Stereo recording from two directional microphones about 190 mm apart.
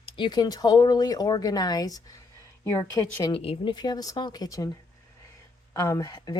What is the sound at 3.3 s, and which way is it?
Speech, 30° left (ahead or behind).